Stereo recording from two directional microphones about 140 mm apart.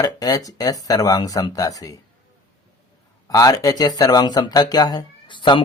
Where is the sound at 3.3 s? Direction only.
25° left (ahead or behind).